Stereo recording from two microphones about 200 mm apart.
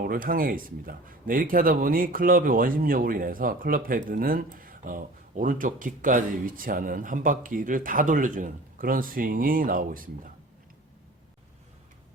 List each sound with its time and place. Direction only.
0.0 s a man's voice: 45° right (ahead or behind)